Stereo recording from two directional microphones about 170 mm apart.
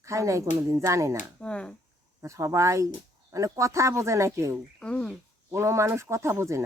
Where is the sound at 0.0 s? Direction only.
20° right (ahead or behind).